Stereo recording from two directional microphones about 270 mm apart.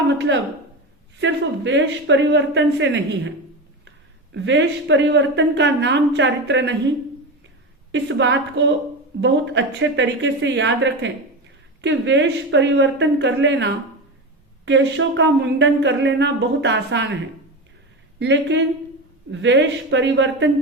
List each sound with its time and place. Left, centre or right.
1.2 s speech: right
4.4 s speech: right
7.9 s speech: right
18.2 s speech: right